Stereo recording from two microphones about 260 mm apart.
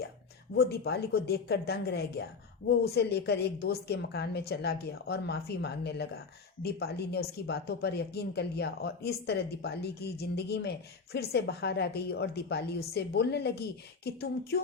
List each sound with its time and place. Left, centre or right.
0.5 s speech: left